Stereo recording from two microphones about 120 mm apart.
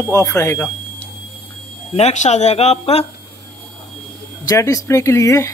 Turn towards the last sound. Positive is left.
turn(degrees=25)  # may be behind; listen again after turning